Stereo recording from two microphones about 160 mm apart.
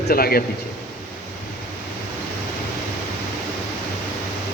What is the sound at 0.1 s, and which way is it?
Speech, 70° left (ahead or behind).